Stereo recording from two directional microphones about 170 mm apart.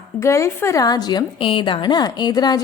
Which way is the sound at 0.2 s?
15° left (ahead or behind).